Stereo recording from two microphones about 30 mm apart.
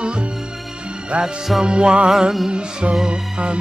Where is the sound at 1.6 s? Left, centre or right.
Right.